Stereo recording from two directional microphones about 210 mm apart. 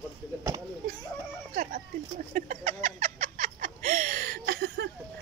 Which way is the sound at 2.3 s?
35° right (ahead or behind).